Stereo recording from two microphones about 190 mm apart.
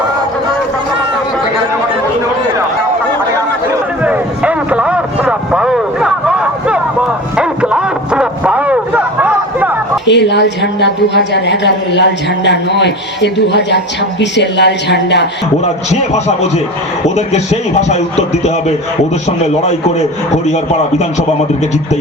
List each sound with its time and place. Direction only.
4.0 s a sound: 5° right (ahead or behind)
10.1 s a woman's voice: 65° left (ahead or behind)
15.6 s a man's voice: 35° left (ahead or behind)
19.6 s a man's voice: 35° left (ahead or behind)